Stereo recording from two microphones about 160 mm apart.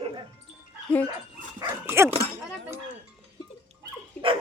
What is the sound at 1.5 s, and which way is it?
Dog, 15° right (ahead or behind).